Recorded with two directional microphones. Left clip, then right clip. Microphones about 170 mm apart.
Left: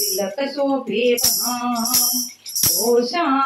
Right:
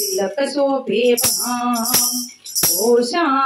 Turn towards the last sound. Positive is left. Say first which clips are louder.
# right 2 dB
turn(degrees=-40)  # may be behind; listen again after turning